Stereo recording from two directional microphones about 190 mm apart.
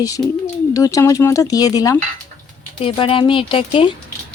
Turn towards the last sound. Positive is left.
turn(degrees=30)  # may be behind; listen again after turning